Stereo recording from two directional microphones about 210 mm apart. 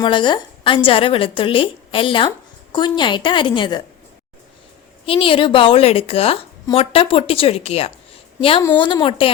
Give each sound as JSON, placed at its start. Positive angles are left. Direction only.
{"t": 0.0, "sound": "a woman's voice", "side_deg": 20}
{"t": 5.0, "sound": "a woman's voice", "side_deg": 25}